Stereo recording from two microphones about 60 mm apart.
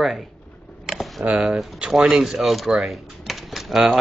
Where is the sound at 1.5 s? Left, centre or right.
Centre.